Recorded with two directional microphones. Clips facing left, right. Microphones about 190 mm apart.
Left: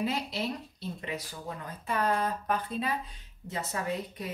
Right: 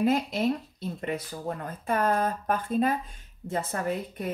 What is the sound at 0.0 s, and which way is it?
Speech, 50° right (ahead or behind).